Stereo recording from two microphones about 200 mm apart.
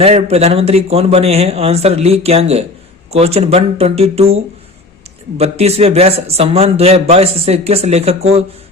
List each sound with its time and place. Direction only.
0.0 s a man's voice: 30° right (ahead or behind)